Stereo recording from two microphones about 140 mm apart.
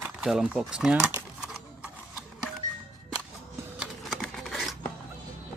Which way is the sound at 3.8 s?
Centre (ahead or behind).